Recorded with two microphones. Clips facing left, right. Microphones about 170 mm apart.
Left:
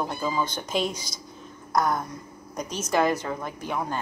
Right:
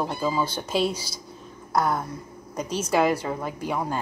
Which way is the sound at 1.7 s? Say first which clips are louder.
Right 1 dB; 5° right (ahead or behind).